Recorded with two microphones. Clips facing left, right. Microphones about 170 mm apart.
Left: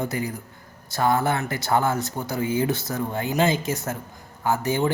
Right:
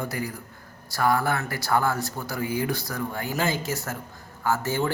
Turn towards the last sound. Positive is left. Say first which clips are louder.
# left 3 dB
turn(degrees=15)  # may be behind; listen again after turning